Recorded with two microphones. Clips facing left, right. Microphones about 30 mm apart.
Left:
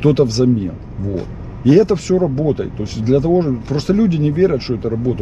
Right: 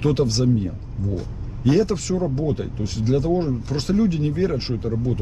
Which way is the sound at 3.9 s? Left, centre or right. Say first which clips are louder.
Left 5 dB; left.